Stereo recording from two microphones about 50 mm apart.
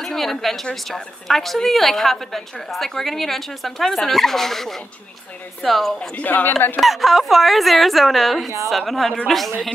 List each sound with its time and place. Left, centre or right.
0.0 s a woman's voice: centre
5.9 s speech: left
6.8 s a woman's voice: centre